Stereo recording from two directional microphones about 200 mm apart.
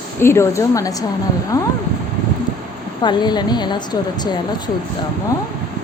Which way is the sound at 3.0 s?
20° left (ahead or behind).